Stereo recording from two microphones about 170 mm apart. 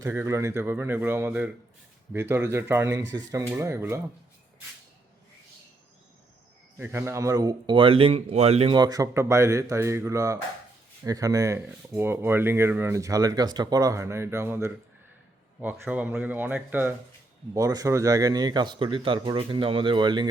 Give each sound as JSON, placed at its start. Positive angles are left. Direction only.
{"t": 0.0, "sound": "speech", "side_deg": -15}
{"t": 6.7, "sound": "speech", "side_deg": -15}
{"t": 8.7, "sound": "speech", "side_deg": -25}
{"t": 17.5, "sound": "speech", "side_deg": -20}